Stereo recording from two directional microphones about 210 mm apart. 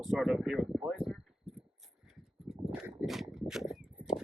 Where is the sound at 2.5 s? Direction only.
5° right (ahead or behind).